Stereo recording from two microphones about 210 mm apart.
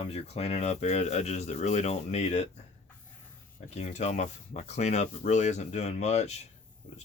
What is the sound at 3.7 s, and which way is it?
Speech, 35° left (ahead or behind).